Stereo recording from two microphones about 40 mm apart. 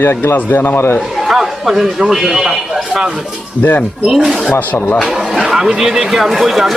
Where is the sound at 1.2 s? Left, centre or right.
Centre.